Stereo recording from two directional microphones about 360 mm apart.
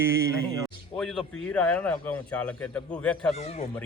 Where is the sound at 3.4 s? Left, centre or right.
Centre.